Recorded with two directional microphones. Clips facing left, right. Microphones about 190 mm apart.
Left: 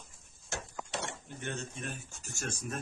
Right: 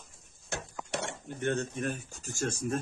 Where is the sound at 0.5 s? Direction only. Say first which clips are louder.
Right 3 dB; 60° right (ahead or behind).